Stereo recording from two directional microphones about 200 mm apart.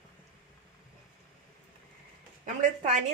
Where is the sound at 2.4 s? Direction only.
35° right (ahead or behind).